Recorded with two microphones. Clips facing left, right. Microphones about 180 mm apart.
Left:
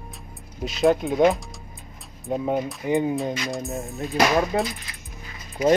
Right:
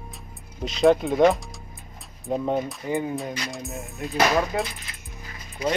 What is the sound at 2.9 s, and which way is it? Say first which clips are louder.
Speech: left 5 dB; 20° left (ahead or behind).